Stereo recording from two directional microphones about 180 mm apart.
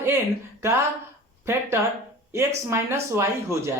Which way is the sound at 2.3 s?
15° right (ahead or behind).